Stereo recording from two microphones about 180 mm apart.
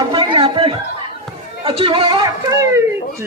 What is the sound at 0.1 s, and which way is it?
Chatter, 30° right (ahead or behind).